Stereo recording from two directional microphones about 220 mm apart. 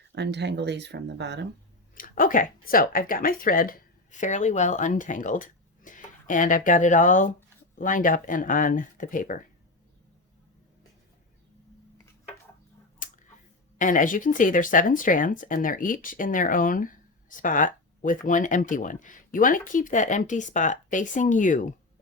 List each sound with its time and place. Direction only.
0.1 s speech: 50° right (ahead or behind)
2.0 s speech: 40° left (ahead or behind)
13.0 s a sound: 35° left (ahead or behind)
13.7 s speech: 35° left (ahead or behind)